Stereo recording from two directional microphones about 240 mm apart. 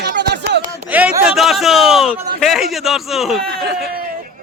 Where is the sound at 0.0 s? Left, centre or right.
Right.